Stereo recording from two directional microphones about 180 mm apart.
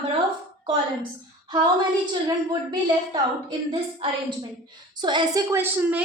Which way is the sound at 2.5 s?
25° right (ahead or behind).